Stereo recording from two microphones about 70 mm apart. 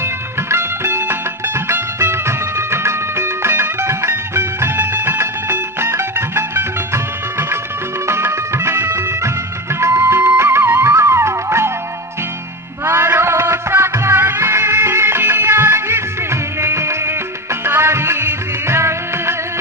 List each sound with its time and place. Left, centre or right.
0.0 s music: right
12.8 s music: right